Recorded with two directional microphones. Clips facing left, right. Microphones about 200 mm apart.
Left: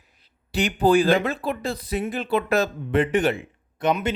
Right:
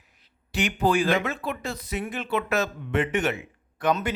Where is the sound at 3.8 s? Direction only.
20° left (ahead or behind).